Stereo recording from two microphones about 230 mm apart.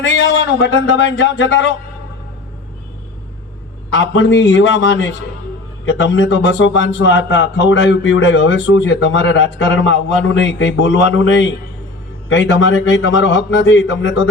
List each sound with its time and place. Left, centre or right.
0.0 s speech: left
4.1 s a man's voice: left